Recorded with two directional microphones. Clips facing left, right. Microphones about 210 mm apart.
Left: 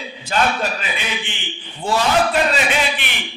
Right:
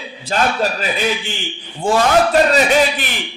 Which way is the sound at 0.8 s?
40° right (ahead or behind).